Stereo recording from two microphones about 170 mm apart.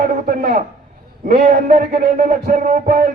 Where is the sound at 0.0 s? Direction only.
60° right (ahead or behind).